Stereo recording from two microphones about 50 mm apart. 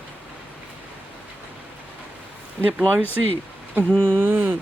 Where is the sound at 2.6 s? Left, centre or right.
Right.